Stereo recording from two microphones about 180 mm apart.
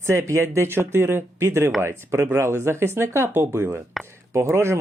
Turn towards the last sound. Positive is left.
turn(degrees=-15)  # may be behind; listen again after turning